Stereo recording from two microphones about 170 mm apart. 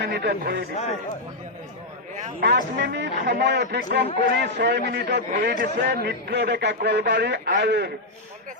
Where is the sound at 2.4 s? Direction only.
85° right.